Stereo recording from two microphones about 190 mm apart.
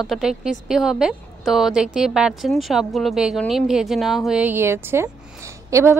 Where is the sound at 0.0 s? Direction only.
Centre (ahead or behind).